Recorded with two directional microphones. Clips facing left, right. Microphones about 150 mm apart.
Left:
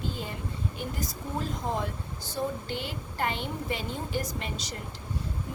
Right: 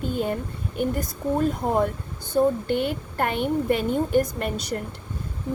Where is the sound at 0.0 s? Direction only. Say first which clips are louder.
Right 10 dB; 55° right (ahead or behind).